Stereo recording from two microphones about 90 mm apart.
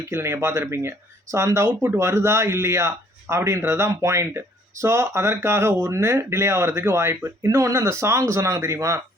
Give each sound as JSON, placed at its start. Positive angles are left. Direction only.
{"t": 0.1, "sound": "speech", "side_deg": -30}